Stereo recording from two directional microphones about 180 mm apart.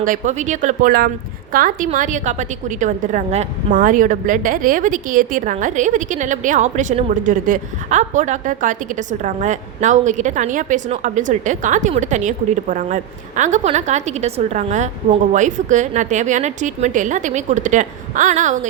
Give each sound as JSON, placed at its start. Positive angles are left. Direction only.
{"t": 0.0, "sound": "a woman's voice", "side_deg": -45}